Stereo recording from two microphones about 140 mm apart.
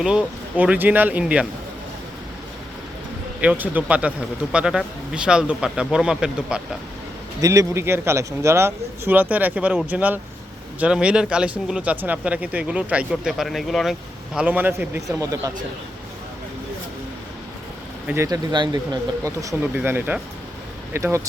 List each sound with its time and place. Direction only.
0.0 s speech: 5° right (ahead or behind)
3.4 s speech: 10° right (ahead or behind)
7.4 s speech: 25° right (ahead or behind); by 13.9 s centre (ahead or behind)
14.3 s speech: 10° right (ahead or behind)
18.1 s speech: 20° right (ahead or behind)
18.5 s speech: 30° right (ahead or behind)